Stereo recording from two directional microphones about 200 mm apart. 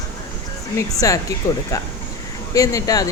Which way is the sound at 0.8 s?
15° left (ahead or behind).